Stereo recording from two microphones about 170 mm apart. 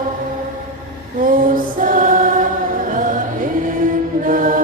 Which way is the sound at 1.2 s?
55° right (ahead or behind).